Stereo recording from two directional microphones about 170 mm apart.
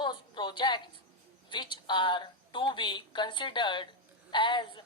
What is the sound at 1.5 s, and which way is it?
A woman's voice, 25° left (ahead or behind).